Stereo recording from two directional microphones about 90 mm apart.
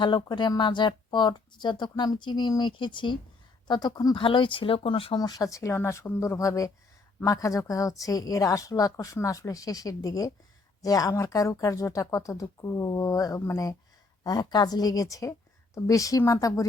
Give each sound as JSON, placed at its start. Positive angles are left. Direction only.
{"t": 0.0, "sound": "speech", "side_deg": 60}
{"t": 3.7, "sound": "speech", "side_deg": 50}
{"t": 5.1, "sound": "speech", "side_deg": 45}
{"t": 14.3, "sound": "speech", "side_deg": 50}